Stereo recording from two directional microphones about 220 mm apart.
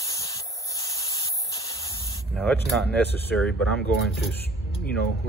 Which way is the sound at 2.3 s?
5° left (ahead or behind).